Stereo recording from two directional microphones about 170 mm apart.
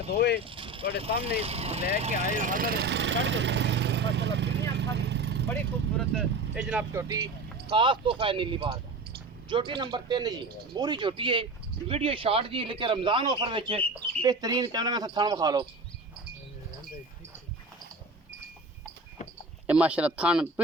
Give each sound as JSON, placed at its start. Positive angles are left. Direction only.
{"t": 0.1, "sound": "speech", "side_deg": 80}
{"t": 0.4, "sound": "vehicle", "side_deg": -30}
{"t": 1.0, "sound": "speech", "side_deg": -35}
{"t": 6.0, "sound": "speech", "side_deg": 0}
{"t": 7.7, "sound": "speech", "side_deg": -30}
{"t": 19.6, "sound": "speech", "side_deg": -10}